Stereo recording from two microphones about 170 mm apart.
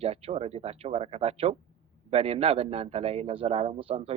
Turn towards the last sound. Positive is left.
turn(degrees=-35)  # may be behind; listen again after turning